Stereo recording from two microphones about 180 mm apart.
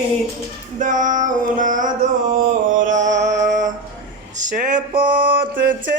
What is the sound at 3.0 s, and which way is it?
Music, 85° right.